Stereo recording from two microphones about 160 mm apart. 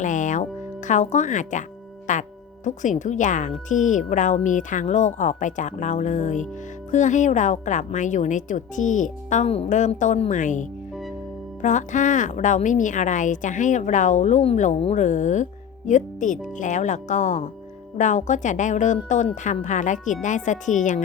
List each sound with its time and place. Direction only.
0.0 s speech: 50° left (ahead or behind)